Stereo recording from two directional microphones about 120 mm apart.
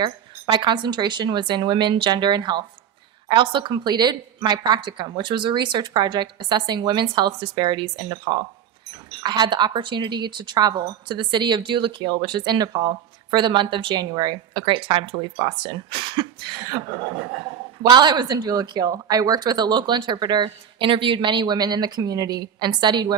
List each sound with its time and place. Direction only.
0.5 s speech: 40° right (ahead or behind)
17.8 s speech: 40° right (ahead or behind)